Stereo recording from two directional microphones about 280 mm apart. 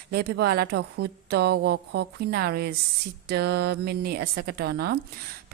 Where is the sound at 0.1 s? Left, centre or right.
Right.